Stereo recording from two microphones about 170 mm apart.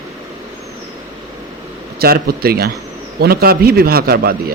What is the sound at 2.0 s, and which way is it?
A man's voice, 65° right (ahead or behind).